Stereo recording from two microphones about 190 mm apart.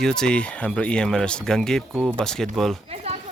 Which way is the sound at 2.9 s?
35° right (ahead or behind).